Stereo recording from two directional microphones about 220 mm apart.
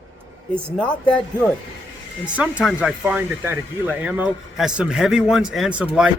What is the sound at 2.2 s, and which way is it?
Speech, 5° right (ahead or behind).